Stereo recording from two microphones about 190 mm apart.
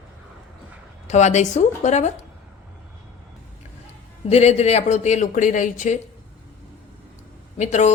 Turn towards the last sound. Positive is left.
turn(degrees=40)  # may be behind; listen again after turning